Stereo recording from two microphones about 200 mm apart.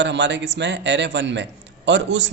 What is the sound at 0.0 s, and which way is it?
A man's voice, 60° right (ahead or behind).